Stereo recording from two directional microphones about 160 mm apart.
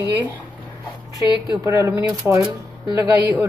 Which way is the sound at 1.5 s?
20° right (ahead or behind).